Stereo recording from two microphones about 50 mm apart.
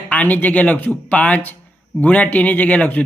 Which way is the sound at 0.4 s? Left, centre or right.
Left.